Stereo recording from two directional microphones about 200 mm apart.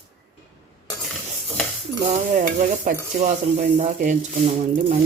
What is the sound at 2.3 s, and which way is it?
Stir, 40° right (ahead or behind).